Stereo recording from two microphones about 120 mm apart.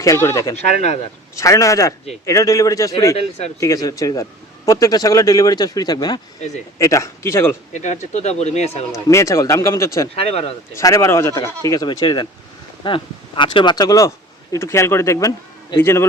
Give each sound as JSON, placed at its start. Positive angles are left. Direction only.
{"t": 0.0, "sound": "speech", "side_deg": 25}
{"t": 0.5, "sound": "speech", "side_deg": 65}
{"t": 1.4, "sound": "speech", "side_deg": 25}
{"t": 3.2, "sound": "speech", "side_deg": 60}
{"t": 3.6, "sound": "a man's voice", "side_deg": 30}
{"t": 7.7, "sound": "speech", "side_deg": 85}
{"t": 8.9, "sound": "speech", "side_deg": 25}
{"t": 10.2, "sound": "speech", "side_deg": 55}
{"t": 10.8, "sound": "speech", "side_deg": 25}